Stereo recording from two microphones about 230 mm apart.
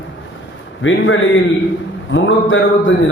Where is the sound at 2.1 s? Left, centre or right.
Left.